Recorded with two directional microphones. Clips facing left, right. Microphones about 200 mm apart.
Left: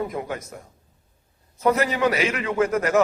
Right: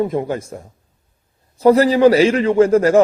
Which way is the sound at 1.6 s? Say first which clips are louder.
Right 10 dB; 30° right (ahead or behind).